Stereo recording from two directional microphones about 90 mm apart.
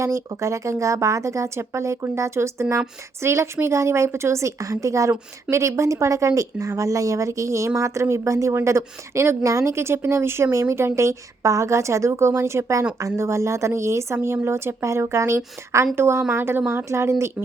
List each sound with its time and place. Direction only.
0.0 s speech: 35° right (ahead or behind)